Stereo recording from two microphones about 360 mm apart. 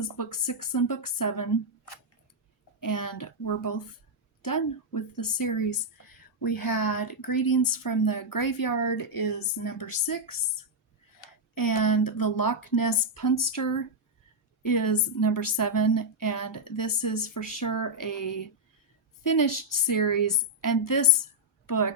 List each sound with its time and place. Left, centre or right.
0.0 s a woman's voice: left
2.8 s a woman's voice: left
11.5 s a woman's voice: left